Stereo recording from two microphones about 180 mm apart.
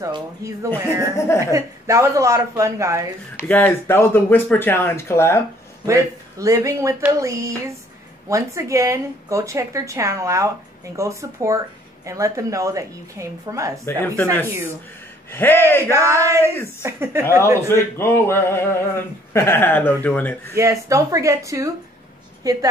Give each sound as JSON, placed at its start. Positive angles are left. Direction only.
{"t": 0.0, "sound": "speech", "side_deg": -15}
{"t": 1.1, "sound": "male singing", "side_deg": 15}
{"t": 1.4, "sound": "speech", "side_deg": -15}
{"t": 3.3, "sound": "male singing", "side_deg": 10}
{"t": 5.9, "sound": "speech", "side_deg": -15}
{"t": 13.8, "sound": "male singing", "side_deg": 10}
{"t": 15.3, "sound": "male singing", "side_deg": 10}
{"t": 16.0, "sound": "speech", "side_deg": -15}
{"t": 17.9, "sound": "male singing", "side_deg": 15}
{"t": 20.5, "sound": "a woman's voice", "side_deg": -15}